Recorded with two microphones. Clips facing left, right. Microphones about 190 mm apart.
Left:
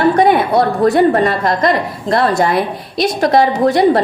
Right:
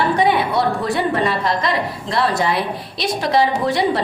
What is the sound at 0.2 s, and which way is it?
A woman's voice, 45° left (ahead or behind).